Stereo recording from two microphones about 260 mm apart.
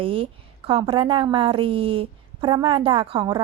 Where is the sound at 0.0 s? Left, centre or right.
Right.